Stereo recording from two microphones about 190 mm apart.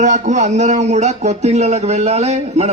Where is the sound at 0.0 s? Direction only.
40° right (ahead or behind).